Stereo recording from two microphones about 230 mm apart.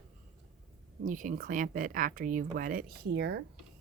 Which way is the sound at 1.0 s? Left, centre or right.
Right.